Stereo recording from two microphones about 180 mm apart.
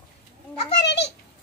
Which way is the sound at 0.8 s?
70° left (ahead or behind).